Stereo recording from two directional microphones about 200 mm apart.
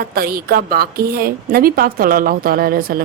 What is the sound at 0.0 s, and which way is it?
Speech, 50° right (ahead or behind).